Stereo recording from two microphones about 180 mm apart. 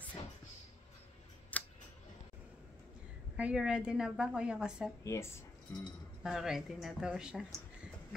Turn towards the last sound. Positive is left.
turn(degrees=-5)  # may be behind; listen again after turning